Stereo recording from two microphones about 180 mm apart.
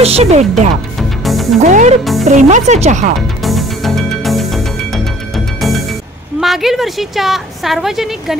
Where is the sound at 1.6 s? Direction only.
40° right (ahead or behind).